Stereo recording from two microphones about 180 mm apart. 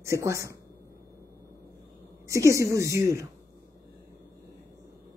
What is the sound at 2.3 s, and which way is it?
Speech, 15° right (ahead or behind).